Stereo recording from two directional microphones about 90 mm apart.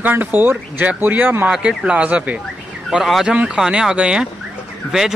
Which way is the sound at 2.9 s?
5° right (ahead or behind).